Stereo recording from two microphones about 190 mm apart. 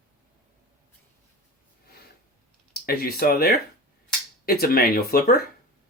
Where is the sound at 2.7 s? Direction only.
55° left (ahead or behind).